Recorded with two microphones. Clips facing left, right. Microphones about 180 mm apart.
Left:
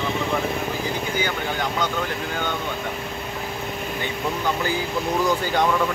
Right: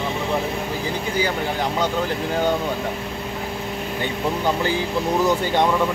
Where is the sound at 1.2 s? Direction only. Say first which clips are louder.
Right 3 dB; 30° right (ahead or behind).